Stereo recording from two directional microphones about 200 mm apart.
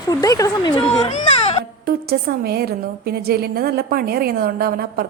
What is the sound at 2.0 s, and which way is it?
A woman's voice, 50° right (ahead or behind).